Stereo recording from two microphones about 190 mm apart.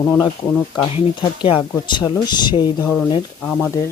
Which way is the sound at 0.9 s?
30° left (ahead or behind).